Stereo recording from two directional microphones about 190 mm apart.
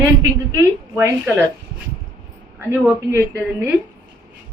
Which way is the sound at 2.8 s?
10° right (ahead or behind).